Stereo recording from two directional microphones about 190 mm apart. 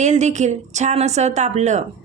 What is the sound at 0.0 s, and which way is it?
A woman's voice, 40° right (ahead or behind).